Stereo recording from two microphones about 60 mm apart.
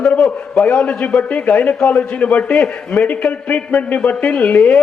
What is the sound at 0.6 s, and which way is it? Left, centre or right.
A man's voice, centre.